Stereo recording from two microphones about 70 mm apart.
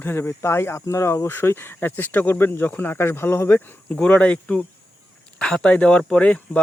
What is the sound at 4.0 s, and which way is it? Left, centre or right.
Speech, centre.